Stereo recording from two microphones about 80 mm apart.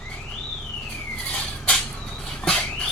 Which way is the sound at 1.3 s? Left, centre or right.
Centre.